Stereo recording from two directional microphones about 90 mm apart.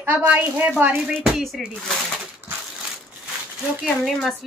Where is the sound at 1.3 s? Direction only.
Centre (ahead or behind).